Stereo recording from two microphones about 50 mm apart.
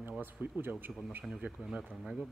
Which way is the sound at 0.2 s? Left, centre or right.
Right.